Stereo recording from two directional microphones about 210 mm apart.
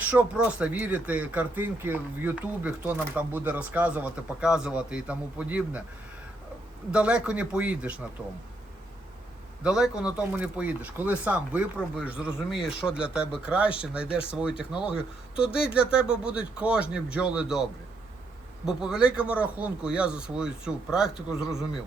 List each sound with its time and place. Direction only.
0.0 s speech: 5° right (ahead or behind)
6.9 s speech: 5° right (ahead or behind)
9.6 s speech: 5° right (ahead or behind)